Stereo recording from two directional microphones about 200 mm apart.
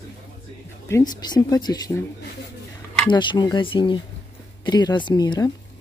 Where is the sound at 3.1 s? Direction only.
25° left (ahead or behind).